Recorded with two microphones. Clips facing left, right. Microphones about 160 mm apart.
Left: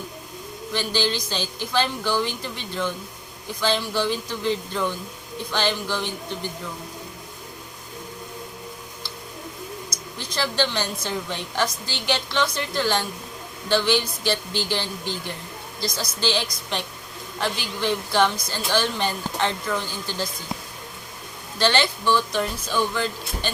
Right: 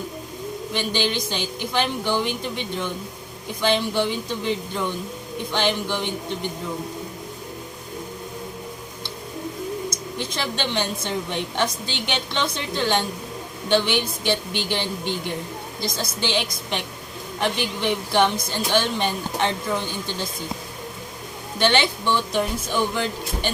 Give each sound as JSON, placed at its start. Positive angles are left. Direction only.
{"t": 0.7, "sound": "a woman's voice", "side_deg": -20}
{"t": 10.2, "sound": "a woman's voice", "side_deg": -20}
{"t": 21.6, "sound": "speech", "side_deg": -20}